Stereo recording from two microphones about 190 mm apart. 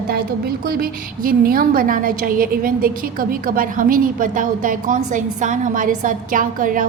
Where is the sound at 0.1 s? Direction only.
55° right (ahead or behind).